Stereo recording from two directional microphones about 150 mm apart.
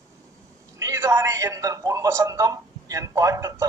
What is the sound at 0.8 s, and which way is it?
A man's voice, 20° right (ahead or behind).